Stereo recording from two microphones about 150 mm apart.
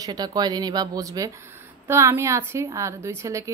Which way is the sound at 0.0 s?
25° right (ahead or behind).